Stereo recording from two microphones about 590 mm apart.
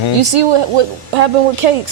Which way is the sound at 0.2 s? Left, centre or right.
Right.